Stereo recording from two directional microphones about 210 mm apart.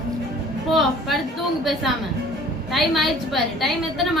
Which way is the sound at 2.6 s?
Centre (ahead or behind).